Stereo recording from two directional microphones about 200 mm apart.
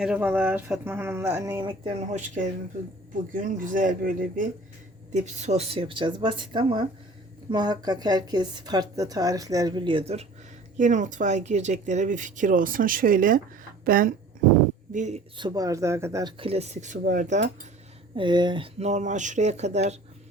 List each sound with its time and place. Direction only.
0.0 s speech: 5° right (ahead or behind)
1.6 s a woman's voice: 25° right (ahead or behind)
15.4 s speech: 20° right (ahead or behind)
16.4 s speech: 30° right (ahead or behind)
18.2 s speech: 20° right (ahead or behind)